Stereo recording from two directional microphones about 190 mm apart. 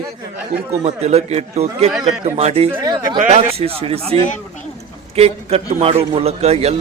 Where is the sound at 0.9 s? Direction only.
35° right (ahead or behind).